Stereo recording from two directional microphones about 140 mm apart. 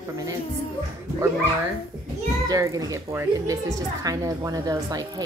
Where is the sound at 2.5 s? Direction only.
25° right (ahead or behind).